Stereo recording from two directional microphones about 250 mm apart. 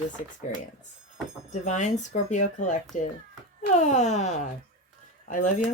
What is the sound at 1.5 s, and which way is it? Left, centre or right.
Speech, left.